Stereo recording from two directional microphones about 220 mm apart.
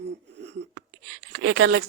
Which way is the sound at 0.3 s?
55° right (ahead or behind).